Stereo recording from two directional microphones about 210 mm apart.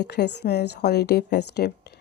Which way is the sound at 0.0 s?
50° left (ahead or behind).